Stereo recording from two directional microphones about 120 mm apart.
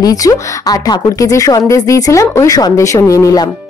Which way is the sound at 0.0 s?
30° left (ahead or behind).